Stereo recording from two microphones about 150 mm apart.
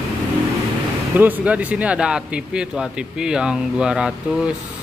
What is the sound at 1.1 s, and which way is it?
Speech, 10° right (ahead or behind).